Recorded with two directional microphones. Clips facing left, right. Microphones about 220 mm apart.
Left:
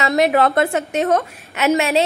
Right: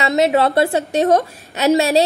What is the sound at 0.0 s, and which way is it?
A woman's voice, 25° right (ahead or behind).